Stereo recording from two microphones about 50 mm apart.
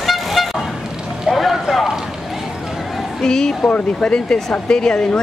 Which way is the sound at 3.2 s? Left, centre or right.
Centre.